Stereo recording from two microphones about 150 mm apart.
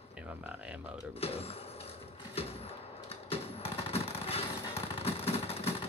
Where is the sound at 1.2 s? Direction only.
40° left (ahead or behind).